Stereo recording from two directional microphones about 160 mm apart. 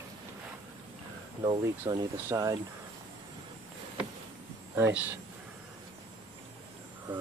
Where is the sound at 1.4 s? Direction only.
30° right (ahead or behind).